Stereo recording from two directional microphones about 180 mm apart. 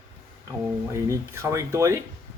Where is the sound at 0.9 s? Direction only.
15° right (ahead or behind).